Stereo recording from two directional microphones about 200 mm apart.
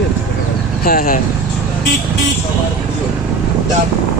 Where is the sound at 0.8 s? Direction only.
45° left (ahead or behind).